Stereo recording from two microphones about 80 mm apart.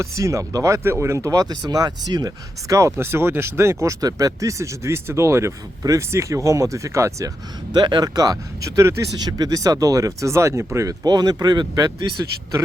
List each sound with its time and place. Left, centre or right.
0.0 s speech: right
7.7 s speech: right
9.1 s speech: right
11.0 s speech: right